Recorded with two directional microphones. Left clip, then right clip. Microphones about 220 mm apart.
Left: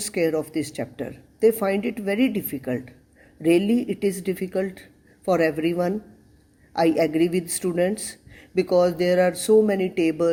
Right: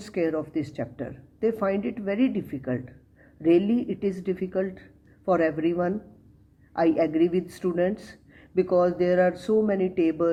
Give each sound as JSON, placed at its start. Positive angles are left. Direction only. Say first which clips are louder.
{"t": 0.0, "sound": "speech", "louder": "left 4 dB", "side_deg": 30}